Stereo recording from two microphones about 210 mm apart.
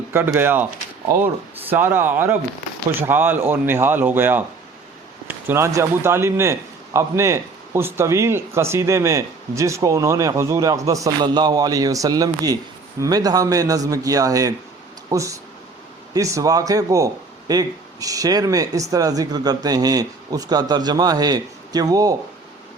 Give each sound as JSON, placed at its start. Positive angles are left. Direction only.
{"t": 0.1, "sound": "a man's voice", "side_deg": -10}